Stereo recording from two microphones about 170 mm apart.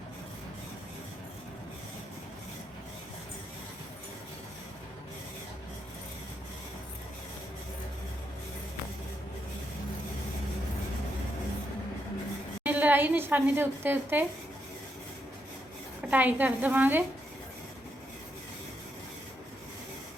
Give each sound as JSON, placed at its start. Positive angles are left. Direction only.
{"t": 12.6, "sound": "a woman's voice", "side_deg": -10}
{"t": 16.0, "sound": "a woman's voice", "side_deg": -10}